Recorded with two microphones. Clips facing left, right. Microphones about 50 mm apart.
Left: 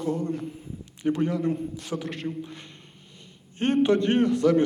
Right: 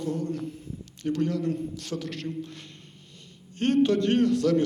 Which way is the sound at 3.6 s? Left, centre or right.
Centre.